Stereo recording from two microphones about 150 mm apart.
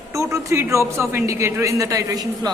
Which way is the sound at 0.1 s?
20° right (ahead or behind).